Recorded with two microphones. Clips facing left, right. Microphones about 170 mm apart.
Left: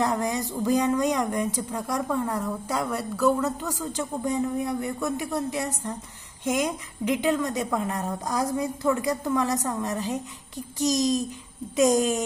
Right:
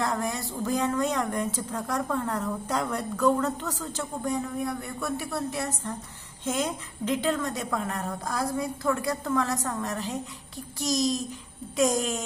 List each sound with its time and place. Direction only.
0.0 s speech: 20° left (ahead or behind)